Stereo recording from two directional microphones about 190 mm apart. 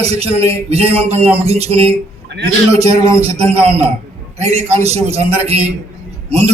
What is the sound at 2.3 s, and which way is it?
Speech, 65° right (ahead or behind).